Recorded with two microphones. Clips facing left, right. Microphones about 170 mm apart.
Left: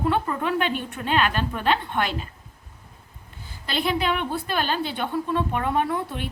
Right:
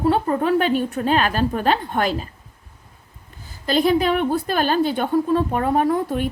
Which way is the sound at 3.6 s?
40° right (ahead or behind).